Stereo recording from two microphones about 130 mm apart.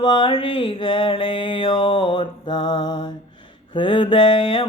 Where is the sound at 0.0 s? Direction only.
40° left (ahead or behind).